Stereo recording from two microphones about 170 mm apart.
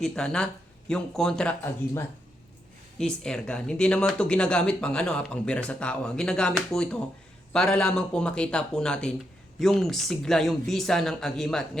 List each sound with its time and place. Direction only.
0.0 s speech: 5° left (ahead or behind)